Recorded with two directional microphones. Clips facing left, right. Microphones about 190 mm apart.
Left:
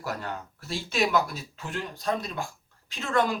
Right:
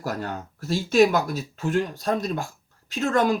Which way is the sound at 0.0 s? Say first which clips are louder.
Right 4 dB; 45° right (ahead or behind).